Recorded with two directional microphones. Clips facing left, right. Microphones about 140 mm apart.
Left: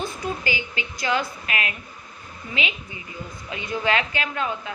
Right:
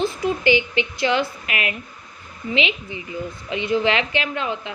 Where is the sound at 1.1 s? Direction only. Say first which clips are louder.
Right 3 dB; 35° left (ahead or behind).